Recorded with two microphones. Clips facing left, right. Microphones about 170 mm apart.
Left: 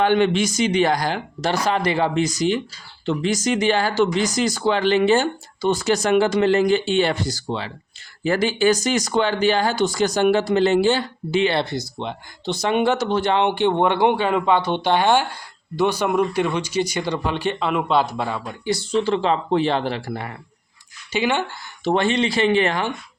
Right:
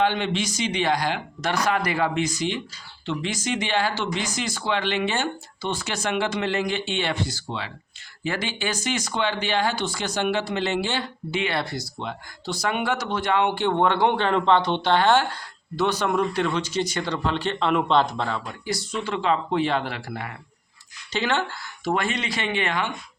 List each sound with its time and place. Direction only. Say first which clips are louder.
0.0 s speech: left 6 dB; 50° left (ahead or behind); by 18.5 s 10° left (ahead or behind)
18.6 s speech: left 12 dB; 25° left (ahead or behind)
21.1 s speech: left 3 dB; 10° left (ahead or behind)
21.8 s speech: left 6 dB; 30° left (ahead or behind)